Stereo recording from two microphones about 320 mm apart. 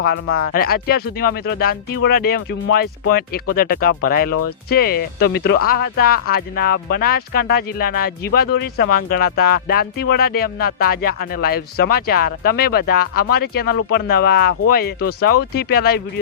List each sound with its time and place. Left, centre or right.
0.0 s speech: left